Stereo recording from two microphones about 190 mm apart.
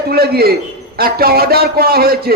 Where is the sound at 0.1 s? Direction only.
55° right (ahead or behind).